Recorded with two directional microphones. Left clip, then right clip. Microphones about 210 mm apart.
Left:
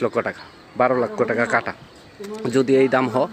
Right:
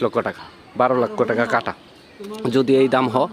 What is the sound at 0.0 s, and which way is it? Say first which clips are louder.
Speech: right 1 dB; 10° right (ahead or behind).